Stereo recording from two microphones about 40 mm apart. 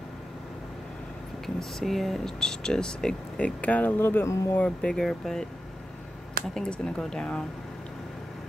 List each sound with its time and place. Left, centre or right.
1.4 s speech: centre
2.4 s speech: centre
3.3 s speech: left
4.0 s speech: left
4.6 s speech: left
4.9 s speech: centre
7.0 s speech: centre